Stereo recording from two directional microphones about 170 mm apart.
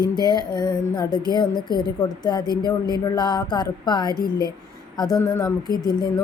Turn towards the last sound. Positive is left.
turn(degrees=25)  # may be behind; listen again after turning